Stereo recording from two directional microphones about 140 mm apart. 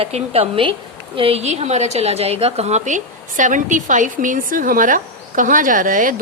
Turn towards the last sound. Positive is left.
turn(degrees=-75)  # may be behind; listen again after turning